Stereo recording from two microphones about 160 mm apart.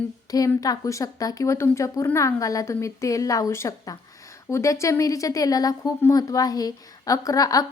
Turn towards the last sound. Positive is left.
turn(degrees=25)  # may be behind; listen again after turning